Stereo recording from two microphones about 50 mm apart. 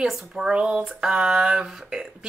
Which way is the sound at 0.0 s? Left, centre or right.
Centre.